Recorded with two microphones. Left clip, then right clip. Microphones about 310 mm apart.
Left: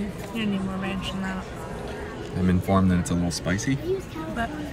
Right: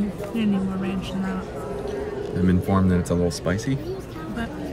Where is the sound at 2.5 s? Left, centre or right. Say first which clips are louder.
Left 1 dB; centre.